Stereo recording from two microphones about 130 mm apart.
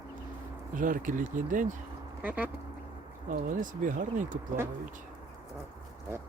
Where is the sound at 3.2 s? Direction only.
90° right.